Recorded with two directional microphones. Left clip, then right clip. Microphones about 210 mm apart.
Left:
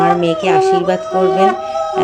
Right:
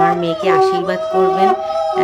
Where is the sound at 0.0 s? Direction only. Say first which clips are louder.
Left 2 dB; 5° left (ahead or behind).